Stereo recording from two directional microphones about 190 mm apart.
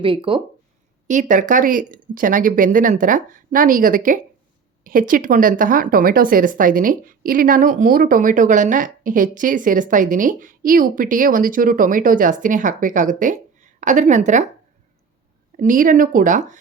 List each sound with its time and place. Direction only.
0.0 s speech: 25° right (ahead or behind)
1.0 s speech: 40° right (ahead or behind)
15.5 s speech: 45° right (ahead or behind)